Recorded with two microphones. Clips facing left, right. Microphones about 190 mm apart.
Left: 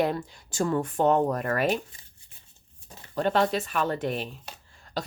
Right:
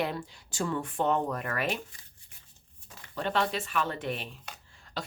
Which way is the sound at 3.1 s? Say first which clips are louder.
Left 6 dB; 45° left (ahead or behind).